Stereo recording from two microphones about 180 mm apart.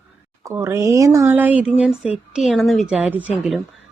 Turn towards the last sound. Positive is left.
turn(degrees=-5)  # may be behind; listen again after turning